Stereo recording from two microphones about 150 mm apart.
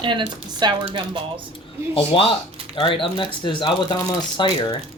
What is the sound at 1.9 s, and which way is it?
Speech, 40° left (ahead or behind).